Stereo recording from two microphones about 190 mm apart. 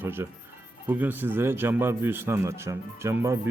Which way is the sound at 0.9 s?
10° right (ahead or behind).